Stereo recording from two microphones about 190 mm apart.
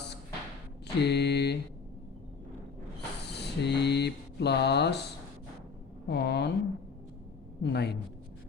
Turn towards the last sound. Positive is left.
turn(degrees=65)  # may be behind; listen again after turning